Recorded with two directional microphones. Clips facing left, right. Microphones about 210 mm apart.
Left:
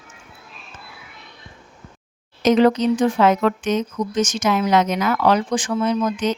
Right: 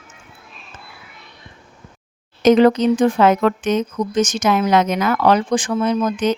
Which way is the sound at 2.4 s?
55° right (ahead or behind).